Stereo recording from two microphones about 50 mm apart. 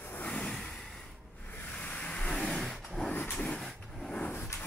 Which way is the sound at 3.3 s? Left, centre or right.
Left.